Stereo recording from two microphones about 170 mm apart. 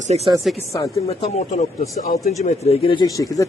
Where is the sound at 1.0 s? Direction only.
40° left (ahead or behind).